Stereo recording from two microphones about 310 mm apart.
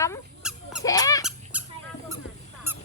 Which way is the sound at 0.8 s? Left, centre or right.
Centre.